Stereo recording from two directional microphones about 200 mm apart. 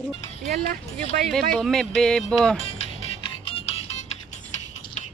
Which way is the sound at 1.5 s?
Centre (ahead or behind).